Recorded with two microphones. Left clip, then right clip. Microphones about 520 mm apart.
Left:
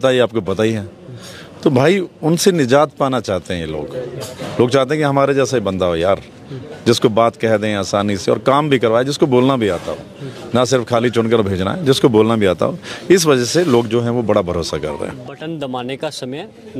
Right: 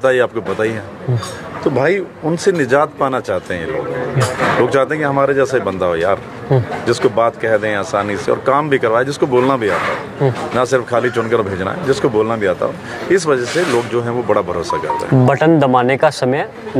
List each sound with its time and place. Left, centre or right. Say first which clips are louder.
0.0 s speech: right 1 dB; left
15.4 s speech: right 9 dB; centre